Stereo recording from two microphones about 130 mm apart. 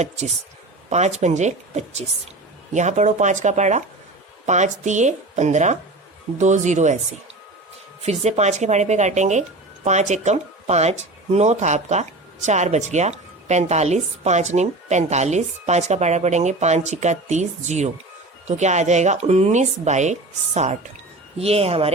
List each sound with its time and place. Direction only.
0.9 s speech: 60° right (ahead or behind)
8.0 s speech: 60° right (ahead or behind)
21.3 s speech: 50° right (ahead or behind)